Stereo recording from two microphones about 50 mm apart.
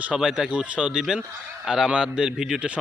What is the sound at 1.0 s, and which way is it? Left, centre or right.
Speech, centre.